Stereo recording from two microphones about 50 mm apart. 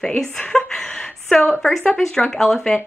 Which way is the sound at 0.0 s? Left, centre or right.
Centre.